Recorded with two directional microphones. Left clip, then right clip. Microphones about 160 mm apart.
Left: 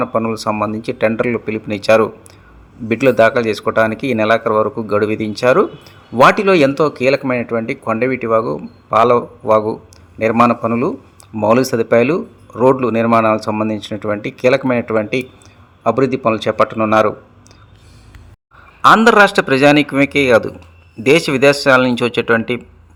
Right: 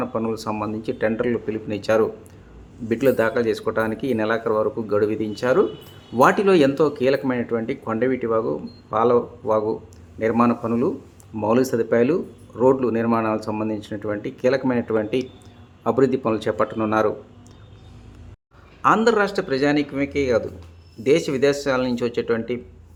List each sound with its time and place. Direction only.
0.0 s speech: 25° left (ahead or behind)
18.8 s a man's voice: 35° left (ahead or behind)